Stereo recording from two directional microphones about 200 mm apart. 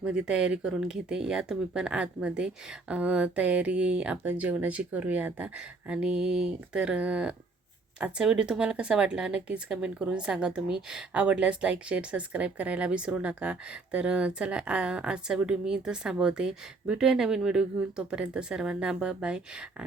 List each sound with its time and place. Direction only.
0.0 s a woman's voice: 5° right (ahead or behind)